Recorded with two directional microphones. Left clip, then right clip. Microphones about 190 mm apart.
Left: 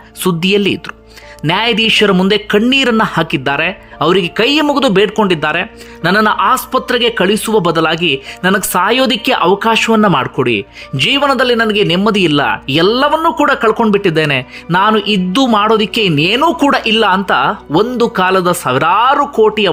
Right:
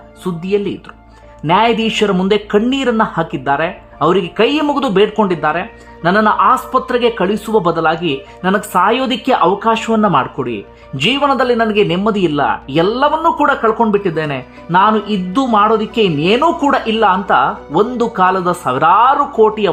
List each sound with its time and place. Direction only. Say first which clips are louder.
0.2 s speech: left 5 dB; 25° left (ahead or behind)
1.5 s speech: left 1 dB; 10° left (ahead or behind)